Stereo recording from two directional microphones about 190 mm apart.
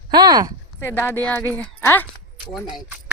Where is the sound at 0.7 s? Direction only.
10° left (ahead or behind).